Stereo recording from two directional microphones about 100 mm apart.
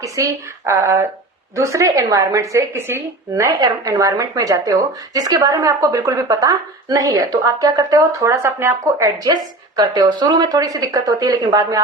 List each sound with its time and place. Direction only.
0.0 s speech: 30° right (ahead or behind)
9.2 s speech: 40° right (ahead or behind)